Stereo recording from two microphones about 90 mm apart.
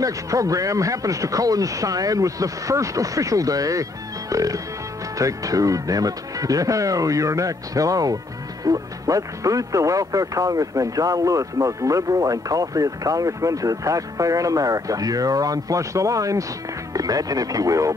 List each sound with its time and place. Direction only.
0.0 s speech: 40° right (ahead or behind)